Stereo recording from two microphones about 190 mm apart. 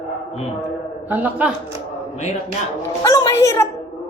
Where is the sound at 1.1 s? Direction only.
10° right (ahead or behind).